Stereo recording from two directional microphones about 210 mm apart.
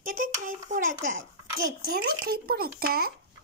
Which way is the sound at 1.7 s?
45° right (ahead or behind).